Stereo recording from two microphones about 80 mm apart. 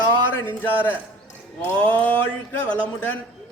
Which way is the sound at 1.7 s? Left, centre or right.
Centre.